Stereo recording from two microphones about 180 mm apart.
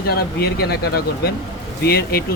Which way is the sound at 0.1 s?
60° left (ahead or behind).